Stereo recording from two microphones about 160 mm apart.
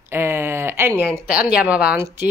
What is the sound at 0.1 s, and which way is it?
A woman's voice, 15° right (ahead or behind).